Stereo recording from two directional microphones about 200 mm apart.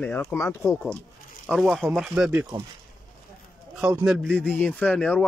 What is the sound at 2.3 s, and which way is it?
Speech, 15° right (ahead or behind).